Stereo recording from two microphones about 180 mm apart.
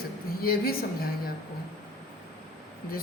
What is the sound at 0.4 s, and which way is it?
Speech, 55° left (ahead or behind).